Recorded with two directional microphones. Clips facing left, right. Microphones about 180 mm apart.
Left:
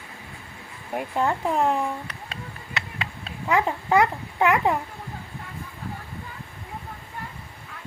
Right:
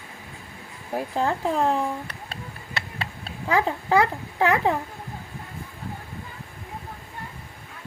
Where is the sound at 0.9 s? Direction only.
35° right (ahead or behind).